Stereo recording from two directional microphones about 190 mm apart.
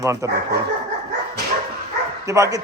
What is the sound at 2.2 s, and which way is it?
Speech, 15° right (ahead or behind).